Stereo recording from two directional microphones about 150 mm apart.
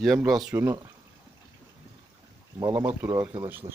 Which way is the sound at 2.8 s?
10° right (ahead or behind).